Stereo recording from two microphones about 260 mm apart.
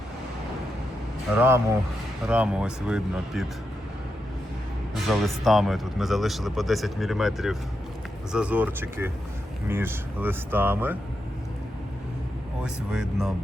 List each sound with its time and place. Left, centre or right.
1.4 s speech: centre
5.0 s speech: centre
12.6 s speech: centre